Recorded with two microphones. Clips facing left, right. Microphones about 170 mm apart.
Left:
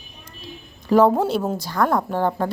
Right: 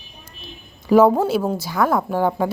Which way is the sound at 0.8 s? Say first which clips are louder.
Right 2 dB; 5° right (ahead or behind).